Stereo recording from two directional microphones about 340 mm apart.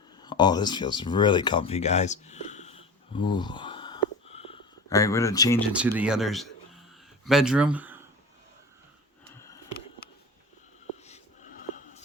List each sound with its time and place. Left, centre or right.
0.2 s speech: centre
5.7 s speech: centre
11.0 s a sound: left